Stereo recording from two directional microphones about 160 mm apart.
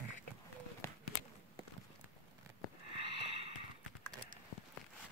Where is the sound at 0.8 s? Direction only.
15° left (ahead or behind).